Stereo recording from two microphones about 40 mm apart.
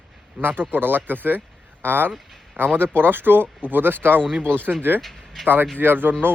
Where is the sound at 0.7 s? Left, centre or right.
Right.